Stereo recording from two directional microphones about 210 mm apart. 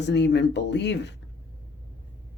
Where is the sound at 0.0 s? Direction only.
55° left (ahead or behind).